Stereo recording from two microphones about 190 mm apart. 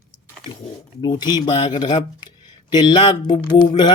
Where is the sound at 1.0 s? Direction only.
20° left (ahead or behind).